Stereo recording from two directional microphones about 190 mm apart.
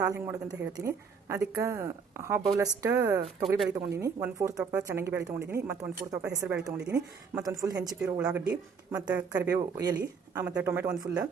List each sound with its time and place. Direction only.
0.0 s speech: 15° right (ahead or behind)
8.2 s speech: 5° right (ahead or behind)
8.4 s speech: 20° right (ahead or behind)